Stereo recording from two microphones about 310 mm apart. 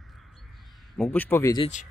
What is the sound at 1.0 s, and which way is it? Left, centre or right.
Speech, centre.